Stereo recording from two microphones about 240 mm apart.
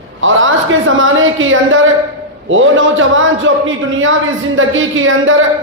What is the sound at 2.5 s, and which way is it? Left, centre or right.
A man's voice, right.